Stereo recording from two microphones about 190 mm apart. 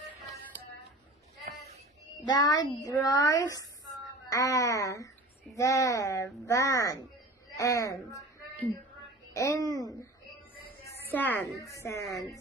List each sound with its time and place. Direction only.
2.2 s a woman's voice: 20° left (ahead or behind)
11.1 s a woman's voice: 15° left (ahead or behind)